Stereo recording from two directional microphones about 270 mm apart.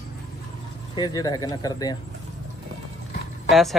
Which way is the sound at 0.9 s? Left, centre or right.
Centre.